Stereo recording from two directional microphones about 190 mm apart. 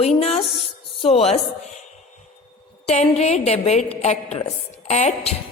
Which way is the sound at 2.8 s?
35° left (ahead or behind).